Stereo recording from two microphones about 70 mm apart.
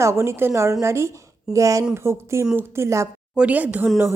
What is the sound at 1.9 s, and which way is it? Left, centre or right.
Speech, right.